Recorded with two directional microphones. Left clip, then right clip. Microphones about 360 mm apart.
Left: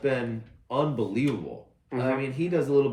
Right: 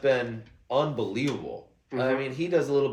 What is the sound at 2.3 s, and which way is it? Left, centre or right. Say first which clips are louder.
Speech: left 2 dB; centre.